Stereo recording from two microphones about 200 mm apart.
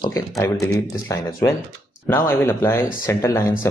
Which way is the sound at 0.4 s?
15° left (ahead or behind).